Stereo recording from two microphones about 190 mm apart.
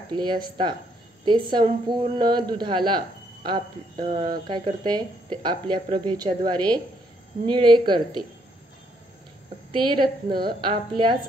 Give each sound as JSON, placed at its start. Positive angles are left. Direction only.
{"t": 0.1, "sound": "speech", "side_deg": -25}
{"t": 9.7, "sound": "speech", "side_deg": -25}